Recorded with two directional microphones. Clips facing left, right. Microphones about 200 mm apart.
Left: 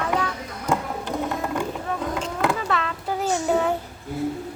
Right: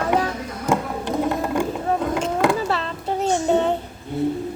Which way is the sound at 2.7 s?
30° right (ahead or behind).